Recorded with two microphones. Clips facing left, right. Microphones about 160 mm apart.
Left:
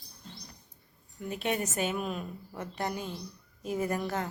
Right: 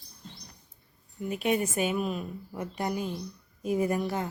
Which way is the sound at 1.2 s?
10° right (ahead or behind).